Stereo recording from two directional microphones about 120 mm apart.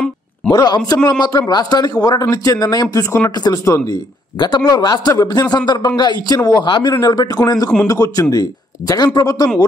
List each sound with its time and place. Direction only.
0.5 s a man's voice: 30° left (ahead or behind)
4.4 s a man's voice: 40° left (ahead or behind)